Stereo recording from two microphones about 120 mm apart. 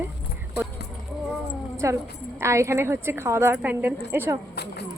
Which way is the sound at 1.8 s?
25° right (ahead or behind).